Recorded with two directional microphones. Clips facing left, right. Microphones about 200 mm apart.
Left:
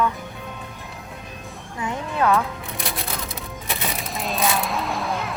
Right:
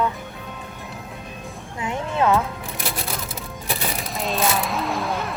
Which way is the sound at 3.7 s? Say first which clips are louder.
Right 1 dB; centre (ahead or behind).